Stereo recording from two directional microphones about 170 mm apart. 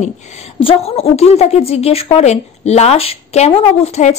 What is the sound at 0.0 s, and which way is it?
A woman's voice, 40° left (ahead or behind).